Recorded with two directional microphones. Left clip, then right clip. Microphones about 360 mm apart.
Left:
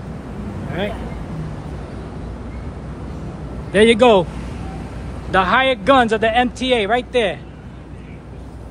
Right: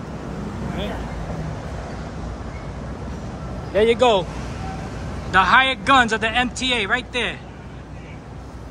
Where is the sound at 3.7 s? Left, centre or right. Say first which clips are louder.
Left 4 dB; left.